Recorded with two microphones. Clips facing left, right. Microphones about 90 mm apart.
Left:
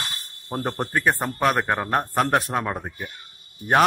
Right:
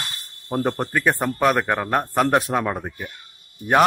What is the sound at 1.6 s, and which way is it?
A man's voice, 15° left (ahead or behind).